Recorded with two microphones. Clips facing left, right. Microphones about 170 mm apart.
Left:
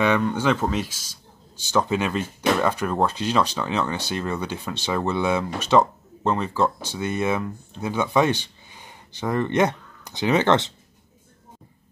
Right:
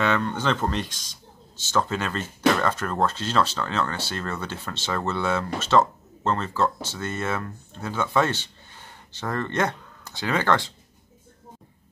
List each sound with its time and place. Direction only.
0.0 s speech: 10° left (ahead or behind)